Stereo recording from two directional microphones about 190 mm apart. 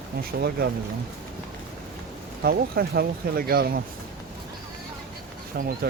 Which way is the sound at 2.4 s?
55° right (ahead or behind).